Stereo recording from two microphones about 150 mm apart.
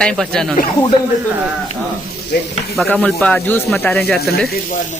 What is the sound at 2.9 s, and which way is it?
Speech, 5° left (ahead or behind).